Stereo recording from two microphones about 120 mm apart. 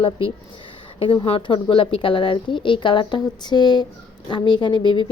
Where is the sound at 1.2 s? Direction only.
45° left (ahead or behind).